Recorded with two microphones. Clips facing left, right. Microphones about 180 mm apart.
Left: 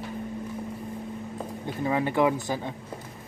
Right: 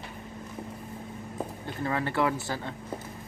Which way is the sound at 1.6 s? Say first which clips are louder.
Left 5 dB; 15° left (ahead or behind).